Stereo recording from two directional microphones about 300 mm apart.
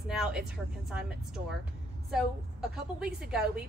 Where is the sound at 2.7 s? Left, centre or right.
Centre.